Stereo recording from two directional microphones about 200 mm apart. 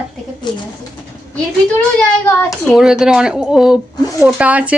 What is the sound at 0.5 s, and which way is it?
Speech, 25° left (ahead or behind).